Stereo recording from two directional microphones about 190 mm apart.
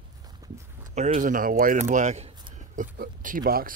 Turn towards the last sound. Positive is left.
turn(degrees=-50)  # may be behind; listen again after turning